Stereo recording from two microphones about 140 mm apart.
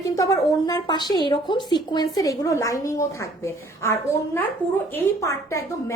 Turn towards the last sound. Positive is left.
turn(degrees=20)  # may be behind; listen again after turning